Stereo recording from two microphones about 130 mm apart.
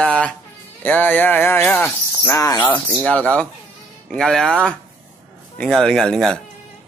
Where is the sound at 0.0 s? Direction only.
10° left (ahead or behind).